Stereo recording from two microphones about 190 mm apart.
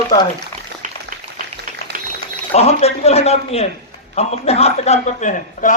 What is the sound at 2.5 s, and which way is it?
A man's voice, 35° left (ahead or behind).